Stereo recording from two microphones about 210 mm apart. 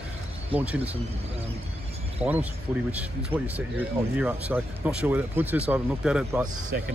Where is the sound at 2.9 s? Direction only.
5° right (ahead or behind).